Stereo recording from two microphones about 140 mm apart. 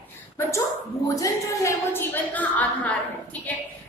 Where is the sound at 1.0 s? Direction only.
25° left (ahead or behind).